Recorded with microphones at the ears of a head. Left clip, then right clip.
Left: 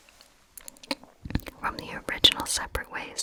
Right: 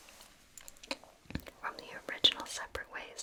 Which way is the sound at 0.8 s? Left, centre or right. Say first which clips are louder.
Left 8 dB; left.